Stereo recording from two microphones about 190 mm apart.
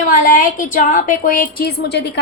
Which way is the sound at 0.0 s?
45° left (ahead or behind).